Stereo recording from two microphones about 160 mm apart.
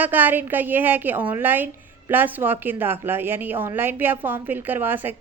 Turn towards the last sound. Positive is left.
turn(degrees=-10)  # may be behind; listen again after turning